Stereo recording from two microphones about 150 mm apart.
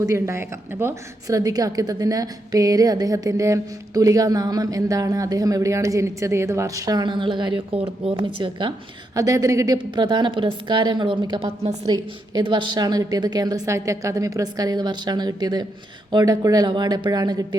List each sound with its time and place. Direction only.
0.0 s a woman's voice: 20° right (ahead or behind)
9.1 s a woman's voice: 20° right (ahead or behind); by 11.8 s 40° right (ahead or behind)
11.9 s a woman's voice: 30° right (ahead or behind)